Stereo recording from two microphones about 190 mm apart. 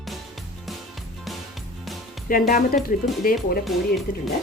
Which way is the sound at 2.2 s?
45° left (ahead or behind).